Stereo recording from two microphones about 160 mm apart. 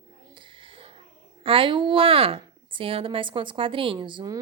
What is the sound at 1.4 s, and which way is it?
A woman's voice, 35° right (ahead or behind).